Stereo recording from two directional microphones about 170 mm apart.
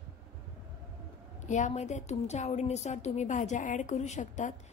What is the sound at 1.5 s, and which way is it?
A woman's voice, 45° left (ahead or behind).